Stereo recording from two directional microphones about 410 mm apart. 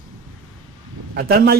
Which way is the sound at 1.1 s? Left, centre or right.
Right.